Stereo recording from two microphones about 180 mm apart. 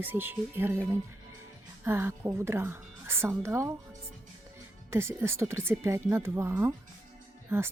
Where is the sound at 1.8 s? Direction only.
15° right (ahead or behind).